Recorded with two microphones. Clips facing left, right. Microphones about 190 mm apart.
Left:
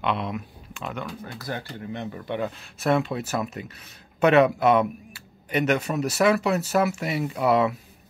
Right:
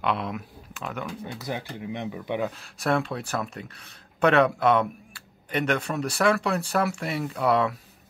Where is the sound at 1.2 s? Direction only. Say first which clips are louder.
Right 2 dB; 20° right (ahead or behind).